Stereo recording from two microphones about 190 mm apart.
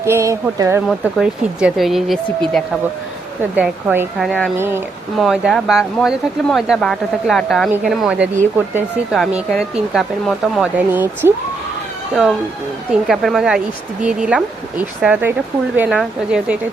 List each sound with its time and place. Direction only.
0.0 s speech: 15° right (ahead or behind)
0.9 s speech: 5° right (ahead or behind)
4.5 s speech: 10° right (ahead or behind)
5.1 s speech: centre (ahead or behind)